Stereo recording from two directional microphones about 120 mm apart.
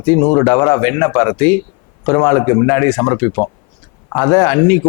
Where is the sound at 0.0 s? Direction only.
15° left (ahead or behind).